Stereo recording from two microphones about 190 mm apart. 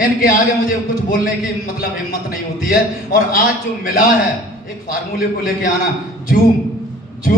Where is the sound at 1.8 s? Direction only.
50° left (ahead or behind).